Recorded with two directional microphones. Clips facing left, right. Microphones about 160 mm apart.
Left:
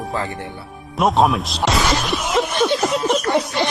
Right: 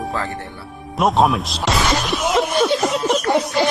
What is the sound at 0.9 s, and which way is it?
Music, centre (ahead or behind).